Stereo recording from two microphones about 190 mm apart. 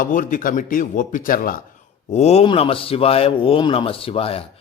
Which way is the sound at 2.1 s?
35° left (ahead or behind).